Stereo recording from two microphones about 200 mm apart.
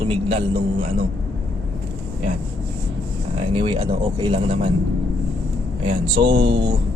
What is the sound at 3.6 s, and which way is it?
A man's voice, 25° right (ahead or behind).